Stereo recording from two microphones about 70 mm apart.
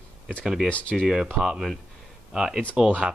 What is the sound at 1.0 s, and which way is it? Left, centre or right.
Speech, centre.